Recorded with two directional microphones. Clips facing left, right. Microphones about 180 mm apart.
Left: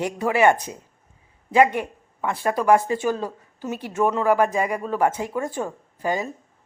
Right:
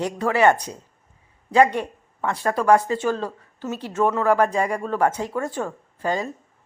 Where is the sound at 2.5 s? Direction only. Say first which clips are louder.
Even; 10° left (ahead or behind).